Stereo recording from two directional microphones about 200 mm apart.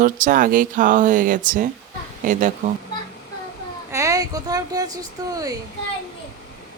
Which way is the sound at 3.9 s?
15° right (ahead or behind).